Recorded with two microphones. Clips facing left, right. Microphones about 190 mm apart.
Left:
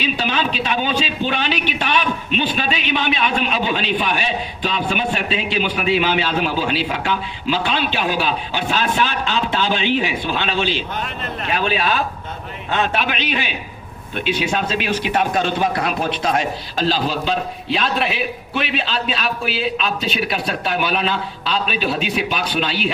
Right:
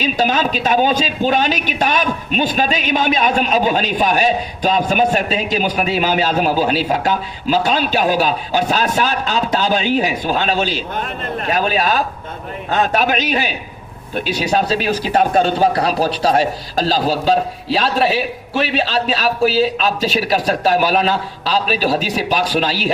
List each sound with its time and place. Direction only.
0.0 s a man's voice: 40° right (ahead or behind)